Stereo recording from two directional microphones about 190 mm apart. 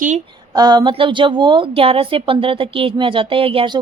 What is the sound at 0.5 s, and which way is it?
A woman's voice, 20° right (ahead or behind).